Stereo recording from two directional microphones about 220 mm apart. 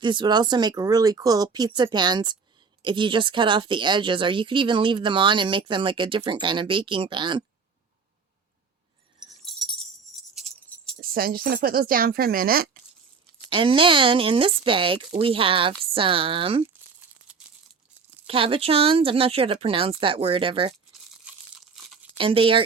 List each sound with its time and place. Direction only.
0.0 s speech: 20° right (ahead or behind)
9.4 s music: centre (ahead or behind)
11.0 s speech: 40° right (ahead or behind)
13.5 s speech: 25° right (ahead or behind)
18.3 s speech: 25° right (ahead or behind)
21.2 s tearing: 5° right (ahead or behind)
22.2 s speech: 25° right (ahead or behind)